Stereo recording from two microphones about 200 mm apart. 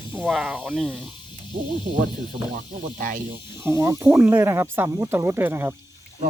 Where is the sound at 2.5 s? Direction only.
50° right (ahead or behind).